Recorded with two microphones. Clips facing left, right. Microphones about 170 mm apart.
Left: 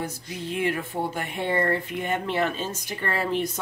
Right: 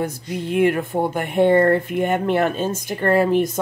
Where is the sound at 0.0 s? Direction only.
55° right (ahead or behind).